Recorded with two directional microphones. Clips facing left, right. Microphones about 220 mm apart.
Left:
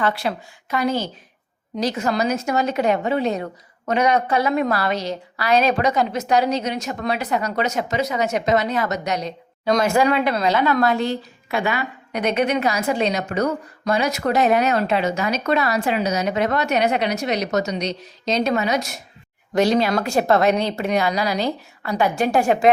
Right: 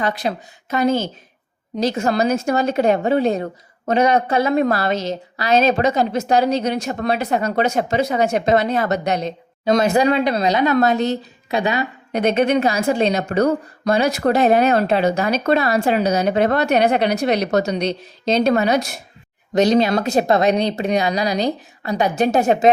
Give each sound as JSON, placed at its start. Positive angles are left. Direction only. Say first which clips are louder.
{"t": 0.0, "sound": "a woman's voice", "louder": "right 1 dB", "side_deg": -20}
{"t": 3.1, "sound": "a woman's voice", "louder": "right 4 dB", "side_deg": -45}
{"t": 3.3, "sound": "a woman's voice", "louder": "right 3 dB", "side_deg": -30}
{"t": 15.8, "sound": "a woman's voice", "louder": "right 4 dB", "side_deg": -40}
{"t": 19.5, "sound": "a woman's voice", "louder": "right 3 dB", "side_deg": -20}